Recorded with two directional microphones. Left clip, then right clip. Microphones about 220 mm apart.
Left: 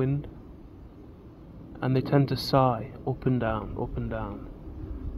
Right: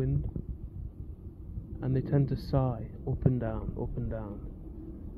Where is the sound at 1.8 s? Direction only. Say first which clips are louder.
Left 7 dB; 20° left (ahead or behind).